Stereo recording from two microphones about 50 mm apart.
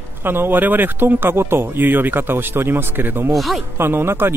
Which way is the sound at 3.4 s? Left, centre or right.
Centre.